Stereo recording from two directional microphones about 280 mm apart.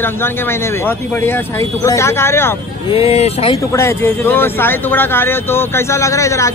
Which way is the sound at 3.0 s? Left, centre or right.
Left.